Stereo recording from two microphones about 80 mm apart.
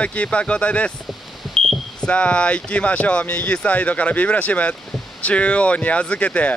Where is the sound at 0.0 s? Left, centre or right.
Centre.